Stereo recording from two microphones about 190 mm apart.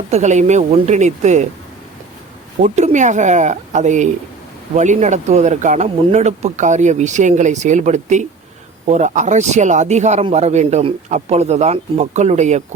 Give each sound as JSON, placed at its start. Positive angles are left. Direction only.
{"t": 0.1, "sound": "speech", "side_deg": -35}
{"t": 2.6, "sound": "speech", "side_deg": -40}